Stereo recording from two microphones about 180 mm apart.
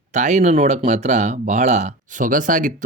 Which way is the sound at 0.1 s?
40° right (ahead or behind).